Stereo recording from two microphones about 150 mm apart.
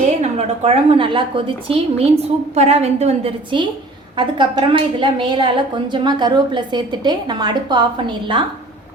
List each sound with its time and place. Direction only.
0.2 s a woman's voice: 45° right (ahead or behind)
4.2 s a woman's voice: 30° right (ahead or behind)